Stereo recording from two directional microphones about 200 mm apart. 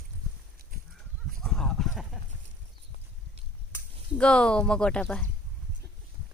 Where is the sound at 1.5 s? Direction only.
5° left (ahead or behind).